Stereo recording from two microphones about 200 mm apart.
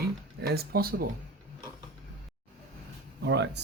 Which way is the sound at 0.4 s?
50° right (ahead or behind).